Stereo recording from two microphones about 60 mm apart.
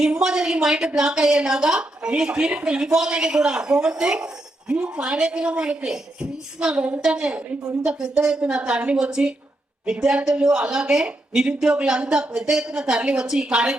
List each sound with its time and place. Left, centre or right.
0.0 s speech: centre